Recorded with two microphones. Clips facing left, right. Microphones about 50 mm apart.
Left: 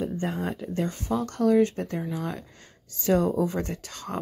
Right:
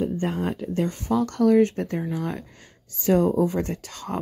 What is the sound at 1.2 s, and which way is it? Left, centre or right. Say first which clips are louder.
Speech: right 3 dB; right.